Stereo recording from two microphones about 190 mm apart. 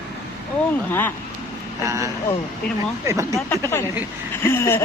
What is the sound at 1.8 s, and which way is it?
Speech, 15° right (ahead or behind).